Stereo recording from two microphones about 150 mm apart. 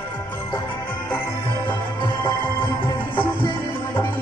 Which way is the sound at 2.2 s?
35° left (ahead or behind).